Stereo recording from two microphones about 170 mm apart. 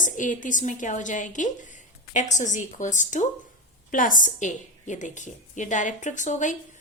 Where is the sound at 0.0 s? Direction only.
50° left (ahead or behind).